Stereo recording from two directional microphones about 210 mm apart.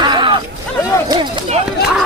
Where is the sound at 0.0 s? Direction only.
20° right (ahead or behind).